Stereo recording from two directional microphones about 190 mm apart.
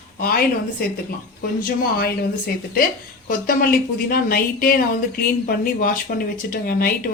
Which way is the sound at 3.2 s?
45° left (ahead or behind).